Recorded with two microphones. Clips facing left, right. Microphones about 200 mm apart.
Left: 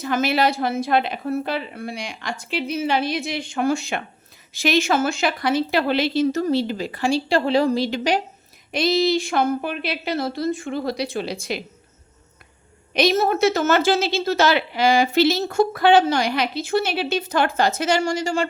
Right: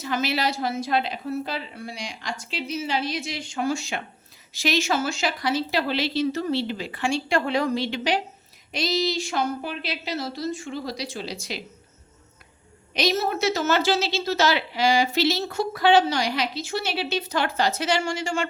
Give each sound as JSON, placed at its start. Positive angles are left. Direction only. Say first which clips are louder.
{"t": 0.0, "sound": "a woman's voice", "louder": "left 5 dB", "side_deg": 50}
{"t": 8.7, "sound": "a woman's voice", "louder": "left 6 dB", "side_deg": 55}
{"t": 12.9, "sound": "a woman's voice", "louder": "left 5 dB", "side_deg": 55}